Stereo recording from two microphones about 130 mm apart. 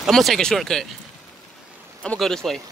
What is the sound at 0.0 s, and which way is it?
Speech, centre (ahead or behind).